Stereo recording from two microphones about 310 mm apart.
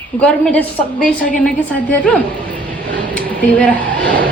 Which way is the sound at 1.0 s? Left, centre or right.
Left.